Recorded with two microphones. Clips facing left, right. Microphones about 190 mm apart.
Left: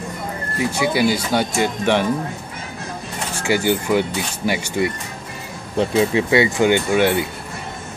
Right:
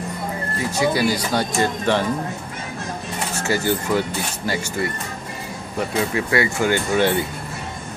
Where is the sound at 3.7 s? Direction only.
20° left (ahead or behind).